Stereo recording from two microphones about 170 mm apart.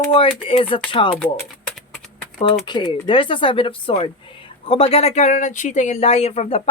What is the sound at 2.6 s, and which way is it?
Speech, 25° left (ahead or behind).